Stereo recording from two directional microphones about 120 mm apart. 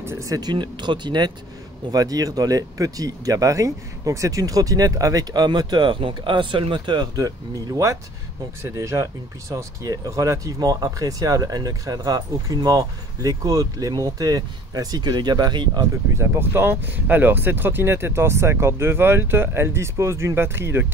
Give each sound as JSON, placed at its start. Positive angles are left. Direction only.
{"t": 0.0, "sound": "speech", "side_deg": -25}
{"t": 16.2, "sound": "speech", "side_deg": -20}